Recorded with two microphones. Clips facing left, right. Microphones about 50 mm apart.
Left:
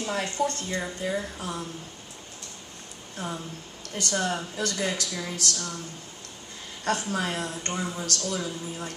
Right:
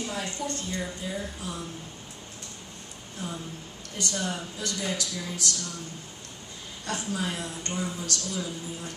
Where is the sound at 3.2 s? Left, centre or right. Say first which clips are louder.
Left 2 dB; left.